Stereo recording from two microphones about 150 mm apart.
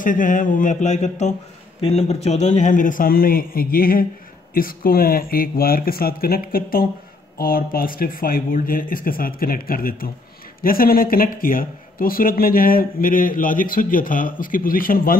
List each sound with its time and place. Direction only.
0.0 s speech: 60° left (ahead or behind)